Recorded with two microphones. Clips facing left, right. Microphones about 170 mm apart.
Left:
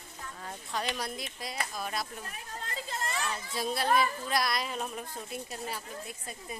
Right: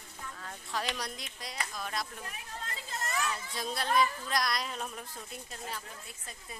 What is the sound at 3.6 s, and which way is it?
Speech, 5° left (ahead or behind).